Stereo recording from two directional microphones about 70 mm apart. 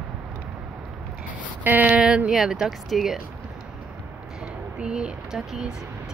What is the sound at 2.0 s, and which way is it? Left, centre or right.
A woman's voice, centre.